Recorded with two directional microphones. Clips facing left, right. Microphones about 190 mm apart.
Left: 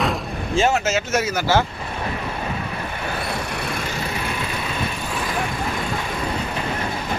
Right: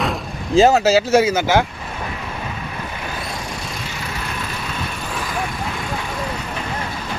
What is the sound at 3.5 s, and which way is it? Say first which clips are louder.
Vehicle: left 3 dB; 60° left (ahead or behind).